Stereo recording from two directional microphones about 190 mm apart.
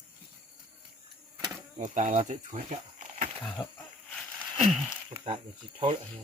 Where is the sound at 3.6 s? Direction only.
20° left (ahead or behind).